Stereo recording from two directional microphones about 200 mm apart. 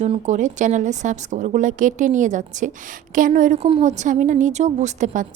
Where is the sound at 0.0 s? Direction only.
35° right (ahead or behind).